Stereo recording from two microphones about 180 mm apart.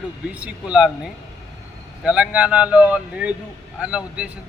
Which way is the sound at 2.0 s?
5° right (ahead or behind).